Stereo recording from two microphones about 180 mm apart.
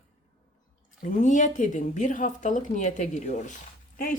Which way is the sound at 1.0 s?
45° left (ahead or behind).